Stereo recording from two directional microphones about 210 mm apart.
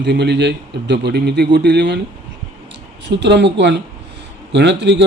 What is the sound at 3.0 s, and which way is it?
Speech, 55° right (ahead or behind).